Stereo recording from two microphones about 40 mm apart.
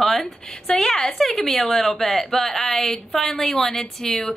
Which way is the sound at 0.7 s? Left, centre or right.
Centre.